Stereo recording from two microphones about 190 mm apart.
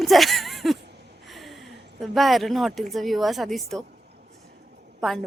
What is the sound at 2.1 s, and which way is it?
Speech, centre (ahead or behind).